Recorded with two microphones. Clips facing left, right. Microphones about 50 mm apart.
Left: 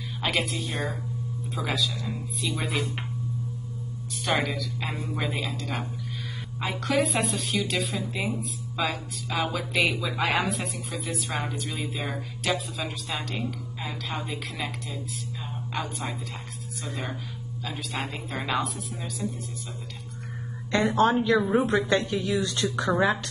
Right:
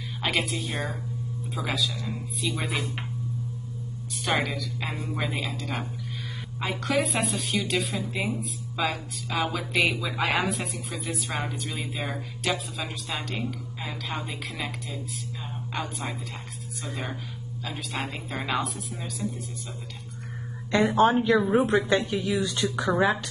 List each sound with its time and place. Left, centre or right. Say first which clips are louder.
0.2 s a woman's voice: even; centre
4.4 s a woman's voice: even; centre
20.7 s a woman's voice: right 1 dB; centre